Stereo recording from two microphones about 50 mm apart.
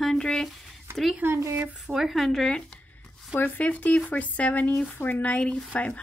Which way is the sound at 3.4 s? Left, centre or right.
Left.